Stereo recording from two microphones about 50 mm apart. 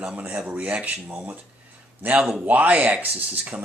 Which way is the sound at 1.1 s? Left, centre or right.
Right.